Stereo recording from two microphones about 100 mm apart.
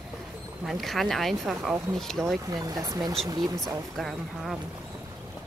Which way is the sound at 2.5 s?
40° right (ahead or behind).